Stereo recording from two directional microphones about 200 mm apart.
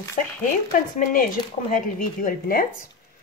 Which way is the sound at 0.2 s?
35° left (ahead or behind).